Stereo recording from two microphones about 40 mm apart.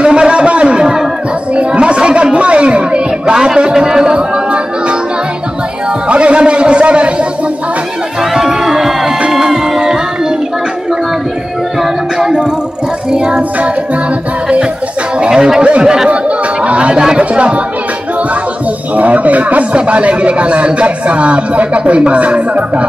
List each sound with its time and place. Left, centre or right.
0.0 s a sound: right
1.5 s chatter: right
3.3 s speech: right
6.0 s a man's voice: right
8.2 s music: centre
12.2 s music: centre
13.1 s child singing: right
15.1 s a sound: right
15.8 s speech: centre
16.1 s chatter: right
17.2 s speech: right
18.9 s speech: right